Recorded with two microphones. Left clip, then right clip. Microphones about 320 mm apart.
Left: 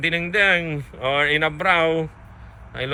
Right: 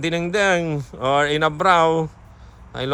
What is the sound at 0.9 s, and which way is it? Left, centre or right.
Speech, right.